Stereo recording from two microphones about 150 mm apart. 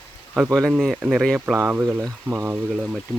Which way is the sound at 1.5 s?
15° right (ahead or behind).